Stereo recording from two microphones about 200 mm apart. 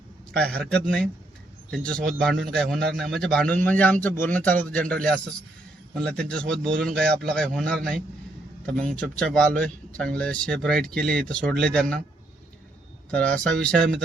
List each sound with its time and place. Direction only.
0.3 s speech: 5° left (ahead or behind)
13.1 s speech: 5° left (ahead or behind)